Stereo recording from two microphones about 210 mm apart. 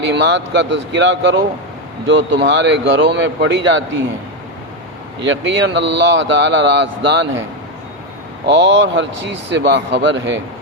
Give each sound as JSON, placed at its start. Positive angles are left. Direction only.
{"t": 0.1, "sound": "speech", "side_deg": -55}
{"t": 5.2, "sound": "speech", "side_deg": -60}
{"t": 8.4, "sound": "speech", "side_deg": -55}